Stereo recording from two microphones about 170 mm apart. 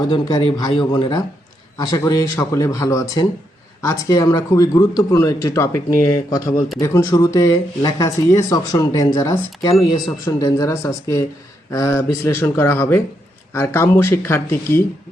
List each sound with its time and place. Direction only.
0.1 s a man's voice: 25° left (ahead or behind)